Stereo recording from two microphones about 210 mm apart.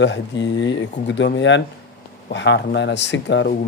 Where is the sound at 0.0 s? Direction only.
60° left (ahead or behind).